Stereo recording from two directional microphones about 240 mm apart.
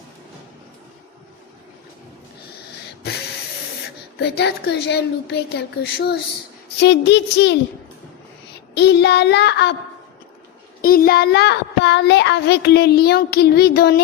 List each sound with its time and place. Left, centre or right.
4.2 s a child's voice: left
8.7 s a child's voice: left
10.8 s a child's voice: left